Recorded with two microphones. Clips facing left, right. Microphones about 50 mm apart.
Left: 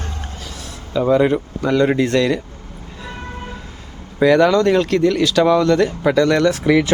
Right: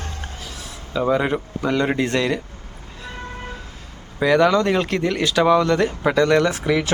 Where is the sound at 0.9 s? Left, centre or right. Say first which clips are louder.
Left 5 dB; centre.